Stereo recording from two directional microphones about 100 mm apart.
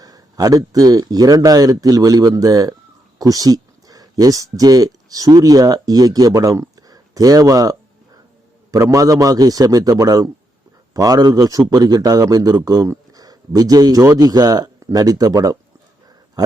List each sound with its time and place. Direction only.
0.0 s a man's voice: 40° right (ahead or behind)